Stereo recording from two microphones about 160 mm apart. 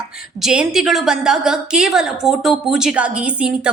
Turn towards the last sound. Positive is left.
turn(degrees=-5)  # may be behind; listen again after turning